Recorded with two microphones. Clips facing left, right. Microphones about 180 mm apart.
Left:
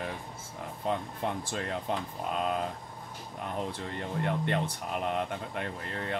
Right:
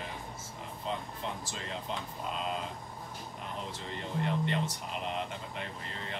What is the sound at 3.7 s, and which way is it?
Speech, 55° left (ahead or behind).